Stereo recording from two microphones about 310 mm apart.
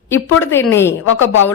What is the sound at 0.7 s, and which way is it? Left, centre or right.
Speech, centre.